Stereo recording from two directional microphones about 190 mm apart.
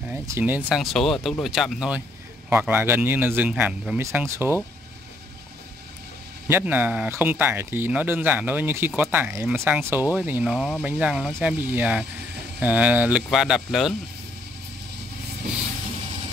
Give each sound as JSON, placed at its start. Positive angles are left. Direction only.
{"t": 0.1, "sound": "speech", "side_deg": -10}
{"t": 6.4, "sound": "speech", "side_deg": -10}